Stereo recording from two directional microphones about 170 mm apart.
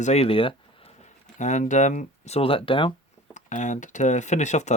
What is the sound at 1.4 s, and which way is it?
Speech, 45° left (ahead or behind).